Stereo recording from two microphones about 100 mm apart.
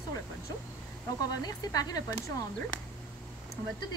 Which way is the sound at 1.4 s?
40° left (ahead or behind).